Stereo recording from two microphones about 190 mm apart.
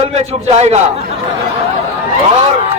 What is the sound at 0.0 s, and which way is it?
Speech, 35° right (ahead or behind).